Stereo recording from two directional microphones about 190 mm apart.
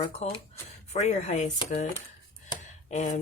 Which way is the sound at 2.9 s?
40° left (ahead or behind).